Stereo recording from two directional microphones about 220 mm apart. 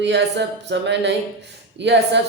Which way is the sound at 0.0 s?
55° right (ahead or behind).